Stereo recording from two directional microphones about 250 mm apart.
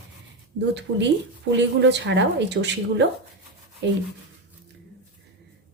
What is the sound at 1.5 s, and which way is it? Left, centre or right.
Speech, right.